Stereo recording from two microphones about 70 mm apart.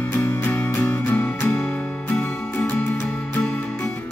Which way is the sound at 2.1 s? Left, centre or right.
Left.